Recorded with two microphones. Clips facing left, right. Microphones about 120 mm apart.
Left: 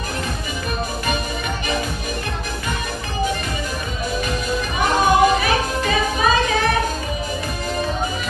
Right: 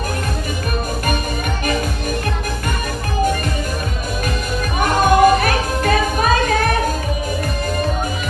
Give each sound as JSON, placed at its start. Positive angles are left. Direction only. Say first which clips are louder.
{"t": 4.7, "sound": "music", "louder": "right 2 dB", "side_deg": -55}